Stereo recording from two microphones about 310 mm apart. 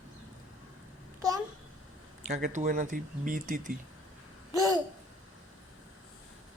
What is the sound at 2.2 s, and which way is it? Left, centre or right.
Speech, right.